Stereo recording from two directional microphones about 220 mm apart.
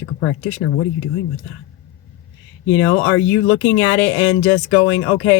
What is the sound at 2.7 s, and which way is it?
Speech, 65° left (ahead or behind).